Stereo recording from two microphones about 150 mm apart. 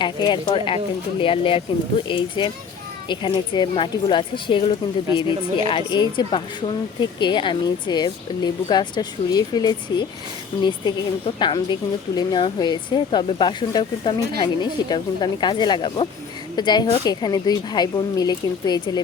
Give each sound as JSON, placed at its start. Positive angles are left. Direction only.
{"t": 0.0, "sound": "a woman's voice", "side_deg": 30}